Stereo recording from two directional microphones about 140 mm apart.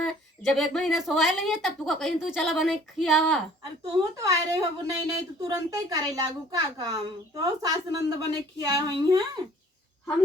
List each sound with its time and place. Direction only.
0.0 s speech: centre (ahead or behind)
3.9 s a woman's voice: 25° right (ahead or behind)